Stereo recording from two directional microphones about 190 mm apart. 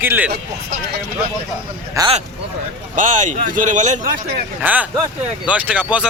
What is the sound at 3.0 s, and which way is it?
Speech, 40° right (ahead or behind).